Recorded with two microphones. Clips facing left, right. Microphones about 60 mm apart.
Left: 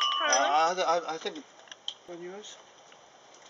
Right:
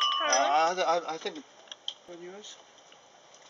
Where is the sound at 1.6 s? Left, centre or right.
Centre.